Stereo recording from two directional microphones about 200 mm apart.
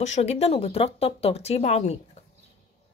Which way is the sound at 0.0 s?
35° left (ahead or behind).